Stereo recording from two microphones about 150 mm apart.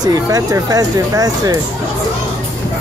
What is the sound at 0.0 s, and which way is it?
Speech, 25° right (ahead or behind).